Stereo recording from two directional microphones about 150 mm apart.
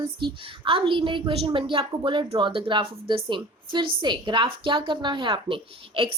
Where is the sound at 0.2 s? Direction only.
35° right (ahead or behind).